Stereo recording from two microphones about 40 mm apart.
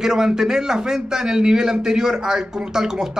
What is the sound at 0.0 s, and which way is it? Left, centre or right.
Speech, centre.